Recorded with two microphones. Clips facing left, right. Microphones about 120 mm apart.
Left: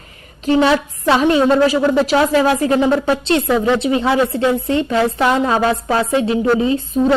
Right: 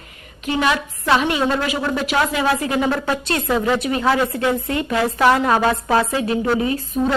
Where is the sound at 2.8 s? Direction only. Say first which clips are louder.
Left 5 dB; 25° left (ahead or behind).